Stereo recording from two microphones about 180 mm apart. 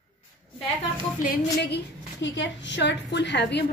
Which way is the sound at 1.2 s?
60° left (ahead or behind).